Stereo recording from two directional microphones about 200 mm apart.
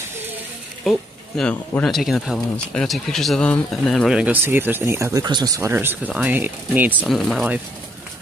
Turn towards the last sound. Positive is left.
turn(degrees=0)  # may be behind; listen again after turning